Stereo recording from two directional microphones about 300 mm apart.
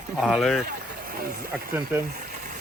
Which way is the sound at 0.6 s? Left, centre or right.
Right.